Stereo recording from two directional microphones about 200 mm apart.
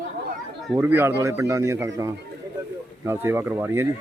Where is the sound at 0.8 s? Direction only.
10° right (ahead or behind).